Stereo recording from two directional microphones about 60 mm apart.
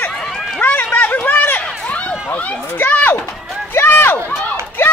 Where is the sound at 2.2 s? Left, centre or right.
Left.